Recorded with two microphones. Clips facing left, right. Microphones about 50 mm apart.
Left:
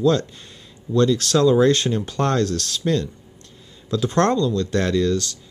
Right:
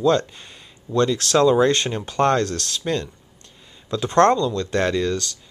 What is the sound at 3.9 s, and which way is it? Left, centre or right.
Speech, right.